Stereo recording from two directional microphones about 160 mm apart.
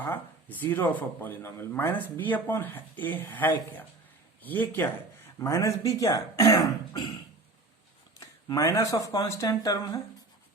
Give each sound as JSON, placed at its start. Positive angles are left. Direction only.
{"t": 0.0, "sound": "speech", "side_deg": 10}
{"t": 8.2, "sound": "speech", "side_deg": 20}